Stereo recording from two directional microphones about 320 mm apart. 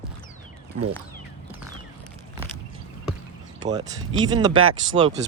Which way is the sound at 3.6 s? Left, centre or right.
Centre.